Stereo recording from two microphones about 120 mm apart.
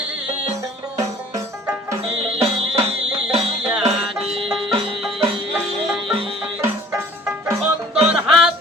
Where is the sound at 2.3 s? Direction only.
55° right (ahead or behind).